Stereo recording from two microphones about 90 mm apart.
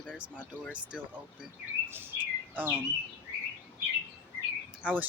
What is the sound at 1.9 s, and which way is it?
Chirp, 25° right (ahead or behind).